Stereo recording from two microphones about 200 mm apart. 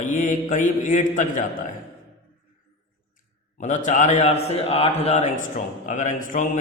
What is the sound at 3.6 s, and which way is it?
A man's voice, 40° left (ahead or behind).